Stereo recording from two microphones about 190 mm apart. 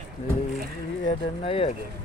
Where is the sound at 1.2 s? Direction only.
30° left (ahead or behind).